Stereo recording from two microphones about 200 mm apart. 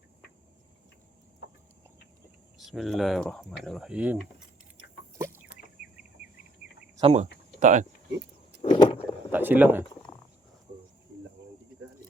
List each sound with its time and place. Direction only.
2.6 s speech: centre (ahead or behind)
5.1 s a sound: 10° right (ahead or behind)
7.0 s speech: 35° right (ahead or behind)
8.6 s vehicle: 30° left (ahead or behind)
9.3 s speech: 10° right (ahead or behind)